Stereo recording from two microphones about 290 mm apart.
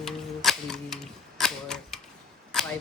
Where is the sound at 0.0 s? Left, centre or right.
Centre.